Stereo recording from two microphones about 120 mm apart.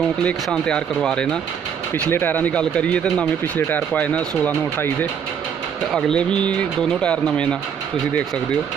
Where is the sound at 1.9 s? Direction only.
20° left (ahead or behind).